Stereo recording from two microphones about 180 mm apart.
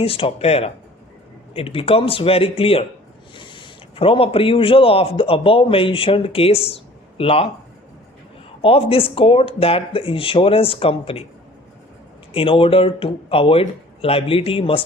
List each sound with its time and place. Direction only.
0.0 s a man's voice: 30° left (ahead or behind)
8.6 s speech: 30° left (ahead or behind)
12.3 s speech: 30° left (ahead or behind)